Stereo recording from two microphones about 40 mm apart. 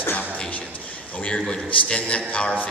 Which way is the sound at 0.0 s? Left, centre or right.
Left.